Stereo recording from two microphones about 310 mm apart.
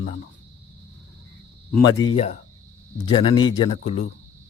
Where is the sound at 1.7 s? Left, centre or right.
Centre.